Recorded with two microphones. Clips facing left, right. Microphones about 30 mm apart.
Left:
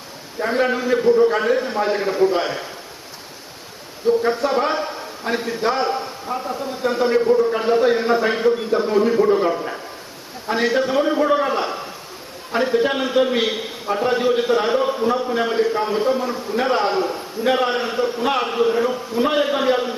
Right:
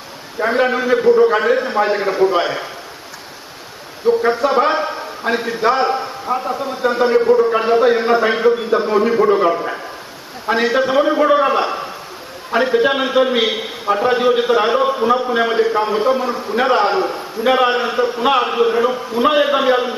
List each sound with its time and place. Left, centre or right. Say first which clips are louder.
0.3 s a man's voice: right 4 dB; right
0.9 s a man's voice: right 3 dB; right
4.2 s a man's voice: right 4 dB; right
6.2 s a man's voice: right 7 dB; right
16.7 s a man's voice: right 4 dB; right